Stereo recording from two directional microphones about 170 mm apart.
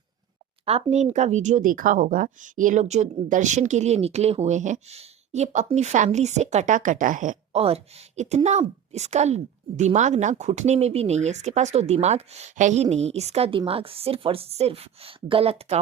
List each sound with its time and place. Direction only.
0.6 s speech: 35° right (ahead or behind)
7.5 s a woman's voice: 35° right (ahead or behind)